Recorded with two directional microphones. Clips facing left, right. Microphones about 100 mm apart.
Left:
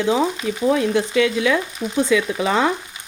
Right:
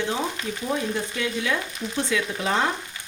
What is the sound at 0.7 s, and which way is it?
Speech, 90° left.